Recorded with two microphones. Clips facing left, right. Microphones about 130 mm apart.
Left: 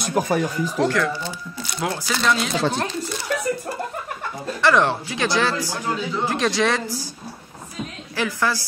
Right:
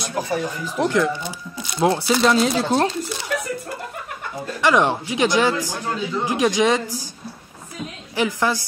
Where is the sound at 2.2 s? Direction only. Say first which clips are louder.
Right 2 dB; 35° right (ahead or behind).